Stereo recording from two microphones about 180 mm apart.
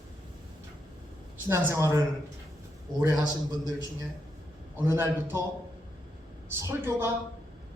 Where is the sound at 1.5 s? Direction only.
15° right (ahead or behind).